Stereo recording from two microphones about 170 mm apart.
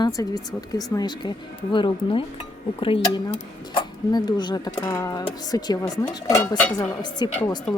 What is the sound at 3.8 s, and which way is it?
Music, 25° left (ahead or behind).